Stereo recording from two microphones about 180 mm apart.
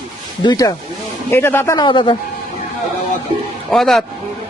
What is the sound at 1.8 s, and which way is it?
Speech, 25° left (ahead or behind).